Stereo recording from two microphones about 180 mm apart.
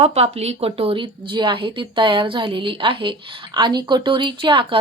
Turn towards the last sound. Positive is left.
turn(degrees=-30)  # may be behind; listen again after turning